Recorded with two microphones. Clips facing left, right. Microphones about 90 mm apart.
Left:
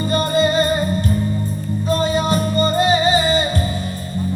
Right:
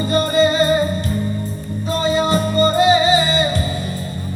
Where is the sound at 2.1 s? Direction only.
30° right (ahead or behind).